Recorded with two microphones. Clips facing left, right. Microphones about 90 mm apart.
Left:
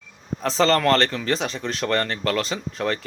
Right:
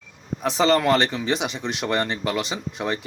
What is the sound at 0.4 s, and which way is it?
Speech, 10° right (ahead or behind).